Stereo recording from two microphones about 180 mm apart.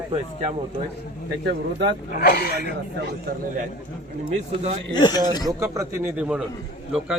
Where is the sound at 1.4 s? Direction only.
70° right (ahead or behind).